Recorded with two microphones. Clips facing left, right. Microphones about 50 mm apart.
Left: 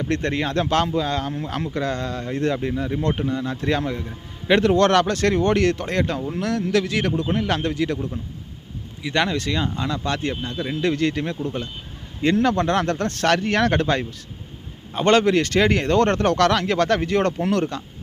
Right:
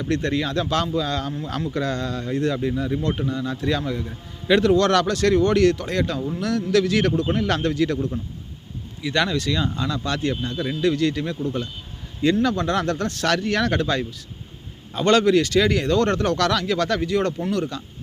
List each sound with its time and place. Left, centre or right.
0.1 s speech: left
9.0 s speech: left
10.8 s speech: left